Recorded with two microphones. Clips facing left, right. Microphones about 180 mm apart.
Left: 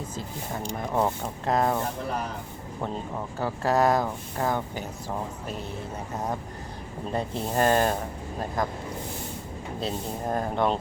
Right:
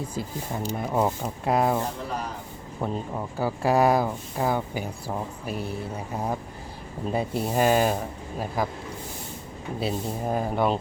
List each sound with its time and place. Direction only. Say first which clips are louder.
0.1 s speech: right 3 dB; 10° right (ahead or behind)
3.3 s speech: right 2 dB; 10° right (ahead or behind)
7.1 s speech: right 3 dB; 10° right (ahead or behind)
9.8 s speech: right 2 dB; 5° right (ahead or behind)